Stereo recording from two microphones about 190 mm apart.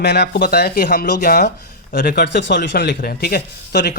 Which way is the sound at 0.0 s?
60° left (ahead or behind).